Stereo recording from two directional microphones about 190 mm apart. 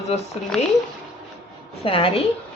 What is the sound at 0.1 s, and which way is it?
Speech, 30° left (ahead or behind).